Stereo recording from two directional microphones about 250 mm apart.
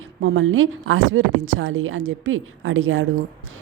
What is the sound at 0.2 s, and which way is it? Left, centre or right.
Speech, right.